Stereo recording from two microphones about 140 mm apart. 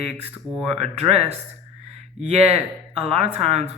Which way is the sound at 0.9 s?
50° right (ahead or behind).